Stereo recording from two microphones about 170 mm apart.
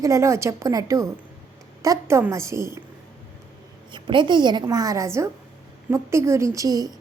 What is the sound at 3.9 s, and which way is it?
A woman's voice, 30° right (ahead or behind).